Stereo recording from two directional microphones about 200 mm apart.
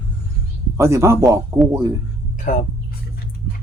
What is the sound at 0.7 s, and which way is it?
Speech, 15° right (ahead or behind).